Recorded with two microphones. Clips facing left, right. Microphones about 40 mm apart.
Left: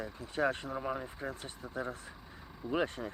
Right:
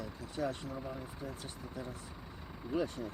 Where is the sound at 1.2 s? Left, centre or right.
Left.